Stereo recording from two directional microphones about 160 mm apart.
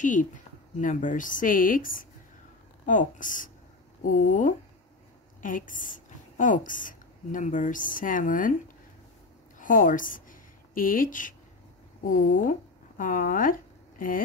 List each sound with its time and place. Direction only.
0.0 s a woman's voice: 55° left (ahead or behind)
9.6 s a woman's voice: 55° left (ahead or behind)